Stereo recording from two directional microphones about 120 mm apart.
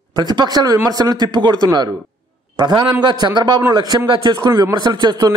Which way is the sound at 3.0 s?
35° right (ahead or behind).